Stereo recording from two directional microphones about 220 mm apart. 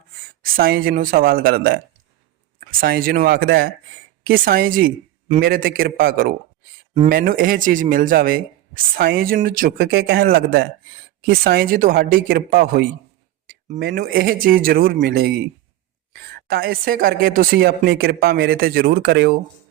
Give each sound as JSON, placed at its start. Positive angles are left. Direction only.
{"t": 0.4, "sound": "speech", "side_deg": -40}
{"t": 16.5, "sound": "speech", "side_deg": -45}